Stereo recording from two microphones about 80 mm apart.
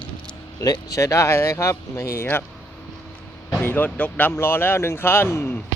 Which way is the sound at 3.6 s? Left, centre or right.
Left.